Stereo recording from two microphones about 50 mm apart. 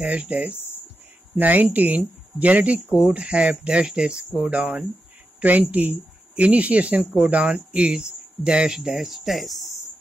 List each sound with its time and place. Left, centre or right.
0.0 s speech: right
7.2 s speech: right
8.7 s speech: centre